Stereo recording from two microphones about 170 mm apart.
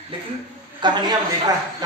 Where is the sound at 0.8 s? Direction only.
25° right (ahead or behind).